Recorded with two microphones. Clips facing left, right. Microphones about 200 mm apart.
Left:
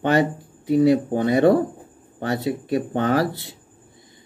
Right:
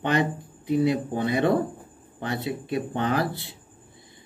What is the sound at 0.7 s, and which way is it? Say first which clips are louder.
Speech: left 6 dB; 45° left (ahead or behind).